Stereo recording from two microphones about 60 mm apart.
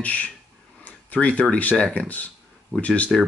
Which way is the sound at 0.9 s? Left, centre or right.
Left.